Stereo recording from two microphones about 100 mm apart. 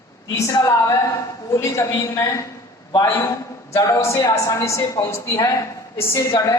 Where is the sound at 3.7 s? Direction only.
30° left (ahead or behind).